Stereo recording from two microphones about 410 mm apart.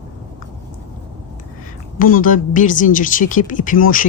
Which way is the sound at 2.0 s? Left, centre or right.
Centre.